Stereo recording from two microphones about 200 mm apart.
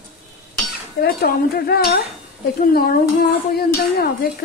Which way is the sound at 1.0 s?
50° left (ahead or behind).